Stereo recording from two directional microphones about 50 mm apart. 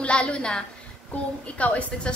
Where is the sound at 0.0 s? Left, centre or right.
Left.